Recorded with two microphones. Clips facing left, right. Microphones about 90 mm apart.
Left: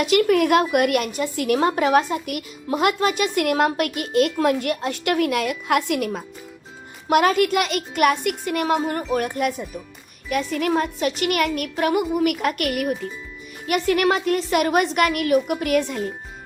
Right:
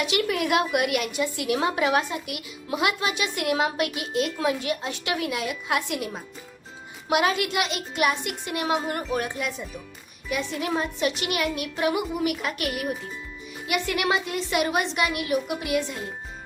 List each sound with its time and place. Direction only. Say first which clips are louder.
0.0 s a woman's voice: left 8 dB; 45° left (ahead or behind)
7.1 s a woman's voice: left 6 dB; 45° left (ahead or behind)
12.7 s speech: left 6 dB; centre (ahead or behind)
13.7 s a woman's voice: left 6 dB; 45° left (ahead or behind)